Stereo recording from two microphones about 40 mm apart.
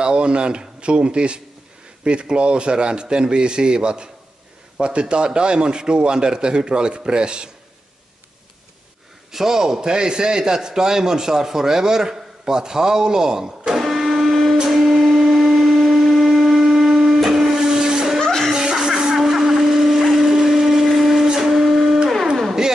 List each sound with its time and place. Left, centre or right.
0.0 s a man's voice: right
9.3 s a man's voice: centre
13.7 s printer: centre
14.6 s music: centre
15.0 s a sound: centre
16.6 s music: centre
17.6 s a sound: centre
18.2 s music: centre
18.5 s blender: centre
20.2 s a sound: centre